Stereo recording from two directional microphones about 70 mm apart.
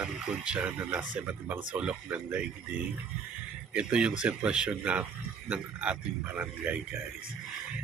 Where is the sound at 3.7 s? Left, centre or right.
Centre.